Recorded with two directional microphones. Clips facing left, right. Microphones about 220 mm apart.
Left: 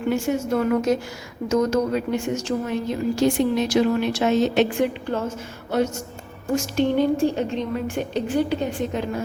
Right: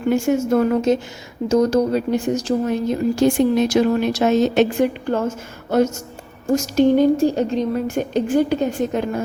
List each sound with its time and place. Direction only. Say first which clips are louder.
0.1 s a woman's voice: right 5 dB; 50° right (ahead or behind)
0.7 s a woman's voice: right 3 dB; 25° right (ahead or behind); by 9.2 s 45° right (ahead or behind)